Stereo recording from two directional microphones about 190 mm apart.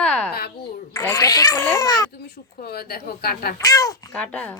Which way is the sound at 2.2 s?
55° left (ahead or behind).